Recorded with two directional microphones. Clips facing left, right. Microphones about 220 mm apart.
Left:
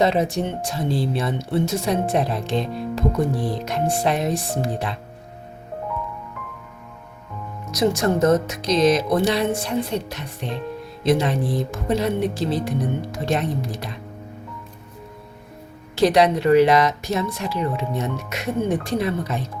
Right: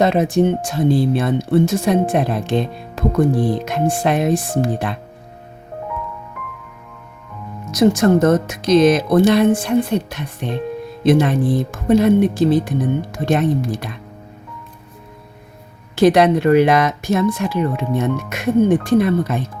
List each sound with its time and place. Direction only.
0.0 s speech: 50° right (ahead or behind)
7.7 s speech: 50° right (ahead or behind)
16.0 s speech: 55° right (ahead or behind)